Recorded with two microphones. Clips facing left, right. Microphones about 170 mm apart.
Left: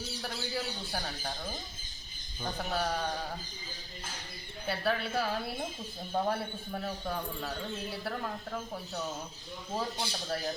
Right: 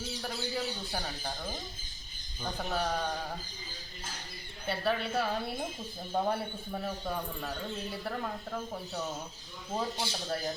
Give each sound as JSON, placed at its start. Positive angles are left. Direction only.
{"t": 0.5, "sound": "speech", "side_deg": -5}
{"t": 4.6, "sound": "speech", "side_deg": 0}
{"t": 6.1, "sound": "a man's voice", "side_deg": -10}